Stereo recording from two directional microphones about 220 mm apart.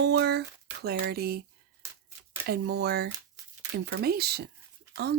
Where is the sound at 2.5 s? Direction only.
50° right (ahead or behind).